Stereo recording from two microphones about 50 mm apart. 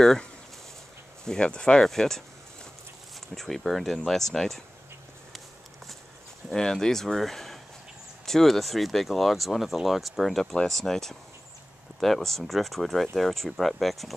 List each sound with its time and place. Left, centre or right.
0.0 s speech: centre
1.9 s a sound: centre
3.2 s speech: centre
6.5 s speech: centre